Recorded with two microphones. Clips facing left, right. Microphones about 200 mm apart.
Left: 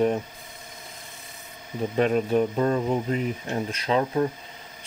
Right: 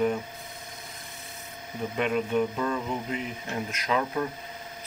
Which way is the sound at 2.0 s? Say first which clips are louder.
Left 4 dB; 35° left (ahead or behind).